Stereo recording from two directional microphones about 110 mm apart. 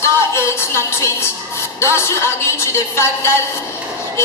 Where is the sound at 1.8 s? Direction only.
25° left (ahead or behind).